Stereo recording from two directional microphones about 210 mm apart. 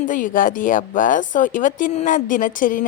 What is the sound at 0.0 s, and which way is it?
A woman's voice, 40° left (ahead or behind).